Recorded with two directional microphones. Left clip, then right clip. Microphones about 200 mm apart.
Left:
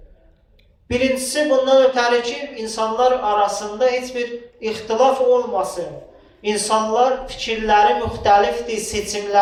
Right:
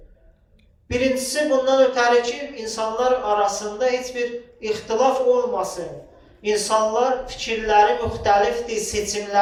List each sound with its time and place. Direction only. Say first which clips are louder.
0.9 s speech: left 2 dB; 40° left (ahead or behind)